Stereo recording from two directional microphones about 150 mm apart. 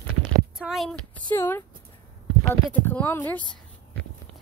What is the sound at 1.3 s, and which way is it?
Speech, 15° left (ahead or behind).